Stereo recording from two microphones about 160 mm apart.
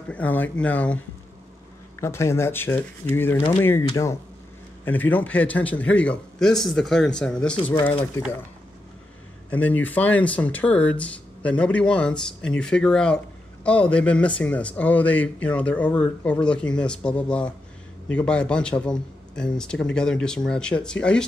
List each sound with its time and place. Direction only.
0.1 s speech: 10° left (ahead or behind)
2.0 s speech: 15° left (ahead or behind)
9.5 s a man's voice: 10° left (ahead or behind)